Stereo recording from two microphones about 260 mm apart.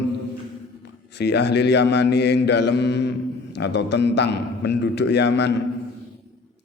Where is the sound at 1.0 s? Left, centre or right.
Left.